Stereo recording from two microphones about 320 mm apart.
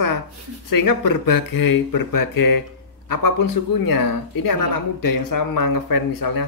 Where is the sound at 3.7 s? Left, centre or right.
Left.